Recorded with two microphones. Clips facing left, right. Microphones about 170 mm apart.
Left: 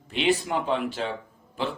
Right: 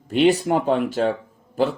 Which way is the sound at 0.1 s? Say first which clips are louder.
Right 7 dB; 40° right (ahead or behind).